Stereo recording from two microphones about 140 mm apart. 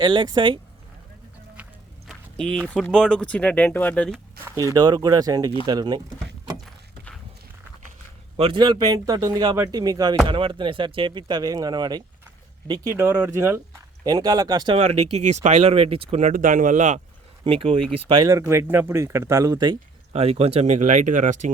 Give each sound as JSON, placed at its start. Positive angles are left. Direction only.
{"t": 0.0, "sound": "speech", "side_deg": -35}
{"t": 1.6, "sound": "music", "side_deg": -10}
{"t": 2.0, "sound": "speech", "side_deg": 5}
{"t": 4.7, "sound": "speech", "side_deg": -30}
{"t": 8.4, "sound": "speech", "side_deg": -35}
{"t": 12.9, "sound": "speech", "side_deg": -15}
{"t": 14.8, "sound": "speech", "side_deg": -50}
{"t": 16.2, "sound": "speech", "side_deg": -75}
{"t": 17.4, "sound": "speech", "side_deg": -45}
{"t": 18.1, "sound": "speech", "side_deg": -25}
{"t": 20.1, "sound": "speech", "side_deg": -45}